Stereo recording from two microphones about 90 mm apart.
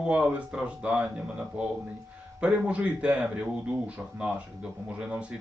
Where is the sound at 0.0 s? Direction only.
10° right (ahead or behind).